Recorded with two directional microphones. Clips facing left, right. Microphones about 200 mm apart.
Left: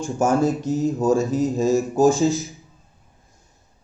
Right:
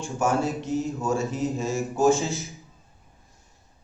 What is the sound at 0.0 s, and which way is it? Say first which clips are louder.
Speech: left 6 dB; 40° left (ahead or behind).